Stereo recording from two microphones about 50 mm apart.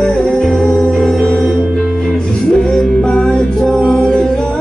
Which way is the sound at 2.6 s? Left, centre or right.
Centre.